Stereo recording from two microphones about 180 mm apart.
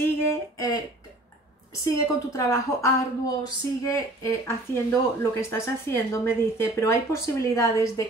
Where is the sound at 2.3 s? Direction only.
15° left (ahead or behind).